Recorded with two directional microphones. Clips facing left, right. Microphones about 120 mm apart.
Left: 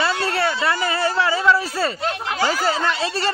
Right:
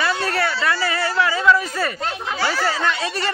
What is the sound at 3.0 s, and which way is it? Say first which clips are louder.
Speech: left 2 dB; 30° left (ahead or behind).